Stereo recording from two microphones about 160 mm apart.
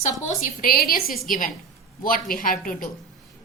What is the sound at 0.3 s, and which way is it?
Speech, 60° left (ahead or behind).